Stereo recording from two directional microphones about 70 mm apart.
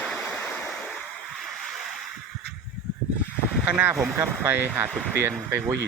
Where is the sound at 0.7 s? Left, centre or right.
Centre.